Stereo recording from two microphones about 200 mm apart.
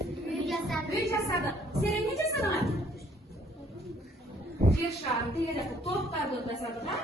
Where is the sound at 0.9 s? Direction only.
15° left (ahead or behind).